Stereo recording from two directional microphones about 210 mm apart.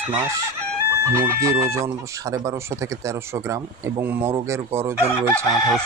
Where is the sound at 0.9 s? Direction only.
10° right (ahead or behind).